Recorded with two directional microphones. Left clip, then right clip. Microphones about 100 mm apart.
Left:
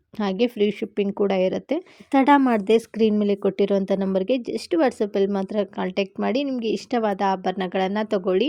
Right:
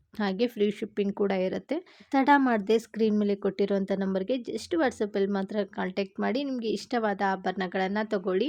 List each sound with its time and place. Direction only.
0.2 s a woman's voice: 35° left (ahead or behind)